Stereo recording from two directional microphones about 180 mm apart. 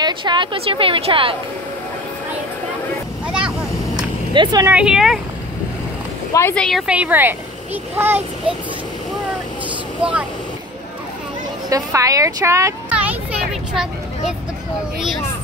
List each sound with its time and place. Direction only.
0.0 s a woman's voice: 25° right (ahead or behind)
3.3 s vehicle: 5° right (ahead or behind)
3.9 s a sound: 25° right (ahead or behind)
4.6 s speech: 5° right (ahead or behind)
6.3 s speech: 10° left (ahead or behind)
6.9 s a child's voice: 10° right (ahead or behind)
11.7 s a sound: 20° right (ahead or behind); by 14.3 s 5° right (ahead or behind)